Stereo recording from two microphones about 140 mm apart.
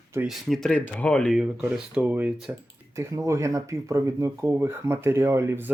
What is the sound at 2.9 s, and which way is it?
Speech, 20° right (ahead or behind).